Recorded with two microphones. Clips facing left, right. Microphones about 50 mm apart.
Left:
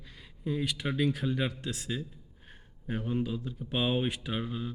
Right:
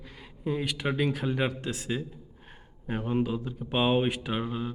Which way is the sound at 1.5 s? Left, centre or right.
Centre.